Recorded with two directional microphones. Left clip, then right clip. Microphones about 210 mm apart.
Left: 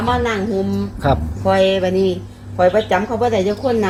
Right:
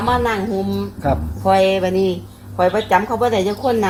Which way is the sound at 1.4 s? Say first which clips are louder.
Even; 5° right (ahead or behind).